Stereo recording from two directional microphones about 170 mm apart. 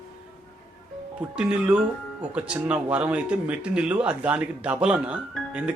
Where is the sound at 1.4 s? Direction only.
5° right (ahead or behind).